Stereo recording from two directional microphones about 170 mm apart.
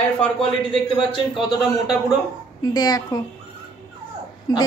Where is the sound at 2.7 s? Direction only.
20° left (ahead or behind).